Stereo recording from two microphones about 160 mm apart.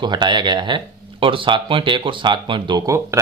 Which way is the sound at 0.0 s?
30° right (ahead or behind).